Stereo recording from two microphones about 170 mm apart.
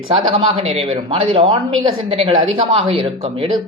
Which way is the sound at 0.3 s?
35° right (ahead or behind).